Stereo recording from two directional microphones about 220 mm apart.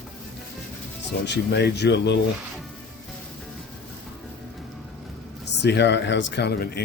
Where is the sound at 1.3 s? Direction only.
50° left (ahead or behind).